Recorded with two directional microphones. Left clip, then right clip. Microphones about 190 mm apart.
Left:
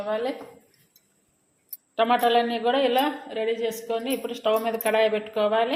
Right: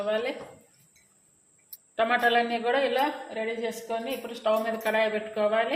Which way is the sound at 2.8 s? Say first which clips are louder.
Left 3 dB; 40° left (ahead or behind).